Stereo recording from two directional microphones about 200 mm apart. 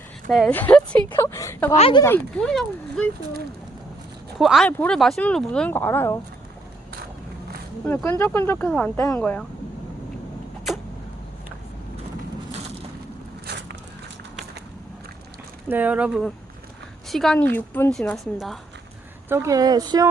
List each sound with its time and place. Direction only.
0.3 s speech: centre (ahead or behind)
1.7 s speech: 30° left (ahead or behind)
2.0 s speech: 10° left (ahead or behind)
4.4 s speech: centre (ahead or behind)
7.9 s speech: 10° left (ahead or behind)
13.5 s biting: 60° right (ahead or behind)
15.7 s speech: 5° right (ahead or behind)
19.3 s speech: 15° right (ahead or behind)